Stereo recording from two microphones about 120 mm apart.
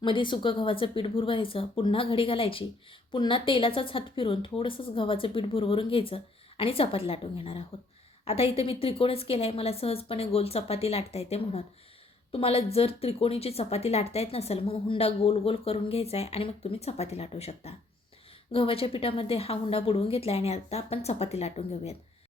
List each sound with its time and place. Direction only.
0.0 s speech: 45° left (ahead or behind); by 21.9 s 60° left (ahead or behind)